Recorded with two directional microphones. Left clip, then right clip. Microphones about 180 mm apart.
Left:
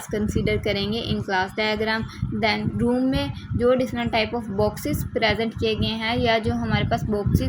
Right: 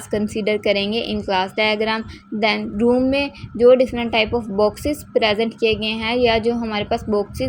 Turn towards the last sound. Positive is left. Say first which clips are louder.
# right 5 dB
turn(degrees=-35)  # may be behind; listen again after turning